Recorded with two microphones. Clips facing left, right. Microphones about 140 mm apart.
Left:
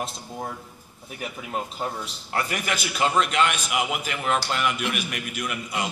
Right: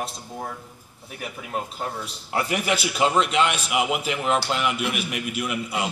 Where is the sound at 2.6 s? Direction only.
30° right (ahead or behind).